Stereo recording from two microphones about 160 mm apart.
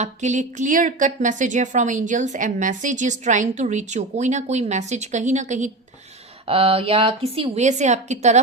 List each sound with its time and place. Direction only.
0.0 s speech: 45° right (ahead or behind)
6.5 s a woman's voice: 35° right (ahead or behind)